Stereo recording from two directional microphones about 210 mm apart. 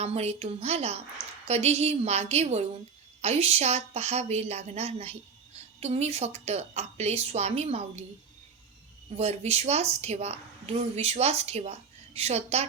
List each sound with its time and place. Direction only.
0.0 s a woman's voice: 30° right (ahead or behind)
9.1 s a woman's voice: 30° right (ahead or behind)